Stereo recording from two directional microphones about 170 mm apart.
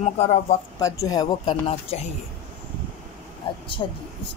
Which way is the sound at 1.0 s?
25° left (ahead or behind).